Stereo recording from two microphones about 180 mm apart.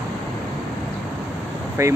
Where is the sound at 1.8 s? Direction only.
15° right (ahead or behind).